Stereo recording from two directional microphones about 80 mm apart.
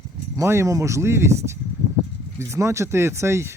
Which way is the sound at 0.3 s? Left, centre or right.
Right.